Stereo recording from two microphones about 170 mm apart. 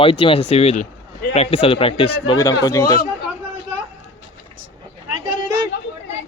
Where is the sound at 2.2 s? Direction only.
20° left (ahead or behind).